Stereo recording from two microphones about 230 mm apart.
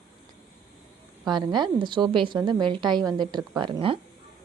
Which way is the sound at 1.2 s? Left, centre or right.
Centre.